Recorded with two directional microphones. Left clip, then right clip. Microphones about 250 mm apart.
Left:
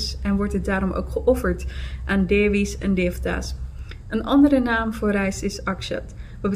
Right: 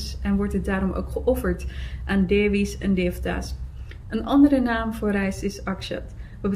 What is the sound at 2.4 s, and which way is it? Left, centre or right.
Speech, right.